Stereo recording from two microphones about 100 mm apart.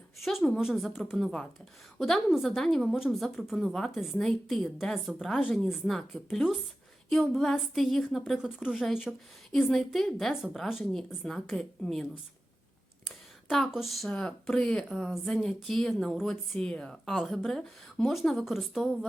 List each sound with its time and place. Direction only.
0.2 s speech: centre (ahead or behind)
13.1 s speech: centre (ahead or behind)